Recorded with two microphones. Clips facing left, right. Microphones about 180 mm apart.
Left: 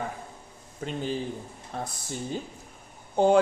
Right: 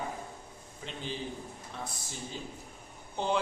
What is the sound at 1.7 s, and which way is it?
Speech, 45° left (ahead or behind).